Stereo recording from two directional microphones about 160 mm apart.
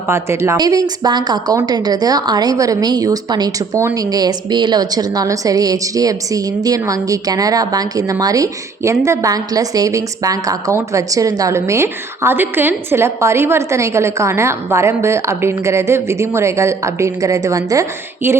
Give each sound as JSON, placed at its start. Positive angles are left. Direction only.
{"t": 0.1, "sound": "a woman's voice", "side_deg": -15}